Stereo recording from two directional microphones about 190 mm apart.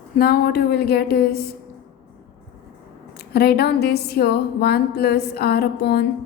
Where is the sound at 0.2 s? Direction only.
55° left (ahead or behind).